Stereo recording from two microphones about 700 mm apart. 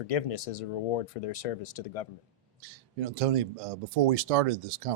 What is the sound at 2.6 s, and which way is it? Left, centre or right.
Speech, right.